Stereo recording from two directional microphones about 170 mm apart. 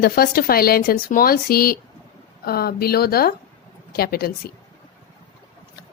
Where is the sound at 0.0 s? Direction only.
60° left (ahead or behind).